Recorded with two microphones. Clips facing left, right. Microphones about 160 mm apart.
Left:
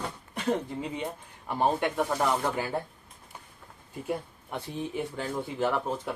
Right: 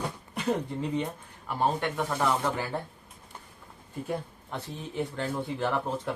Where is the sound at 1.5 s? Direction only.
15° left (ahead or behind).